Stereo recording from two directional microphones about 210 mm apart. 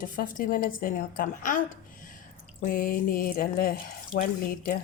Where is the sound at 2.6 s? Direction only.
40° left (ahead or behind).